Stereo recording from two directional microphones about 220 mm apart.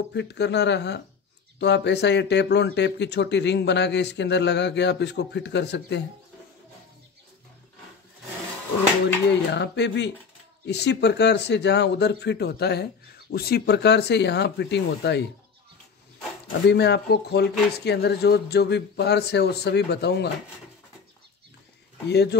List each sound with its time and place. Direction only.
0.1 s speech: 50° left (ahead or behind)
9.5 s speech: 50° left (ahead or behind)
16.6 s speech: 50° left (ahead or behind)
22.1 s speech: 50° left (ahead or behind)